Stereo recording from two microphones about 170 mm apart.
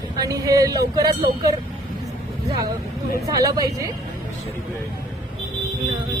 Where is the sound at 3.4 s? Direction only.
20° right (ahead or behind).